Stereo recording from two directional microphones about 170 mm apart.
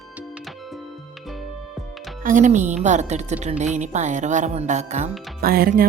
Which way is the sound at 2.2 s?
45° right (ahead or behind).